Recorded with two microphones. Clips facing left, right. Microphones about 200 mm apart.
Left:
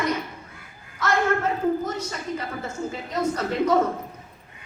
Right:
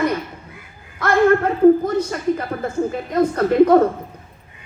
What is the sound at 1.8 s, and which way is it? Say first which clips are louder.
A woman's voice: right 9 dB; 55° right (ahead or behind).